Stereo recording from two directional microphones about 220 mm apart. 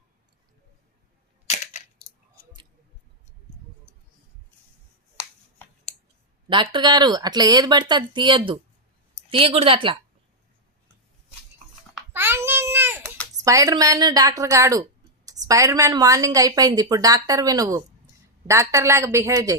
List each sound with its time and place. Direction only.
6.5 s speech: 20° right (ahead or behind)
12.1 s babbling: 10° right (ahead or behind)
13.4 s a woman's voice: 15° right (ahead or behind)